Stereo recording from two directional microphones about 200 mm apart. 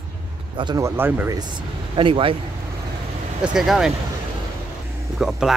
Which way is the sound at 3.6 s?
Centre (ahead or behind).